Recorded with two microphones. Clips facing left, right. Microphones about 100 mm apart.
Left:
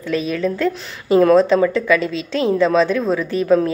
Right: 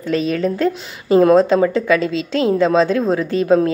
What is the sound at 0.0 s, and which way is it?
A woman's voice, 35° right (ahead or behind).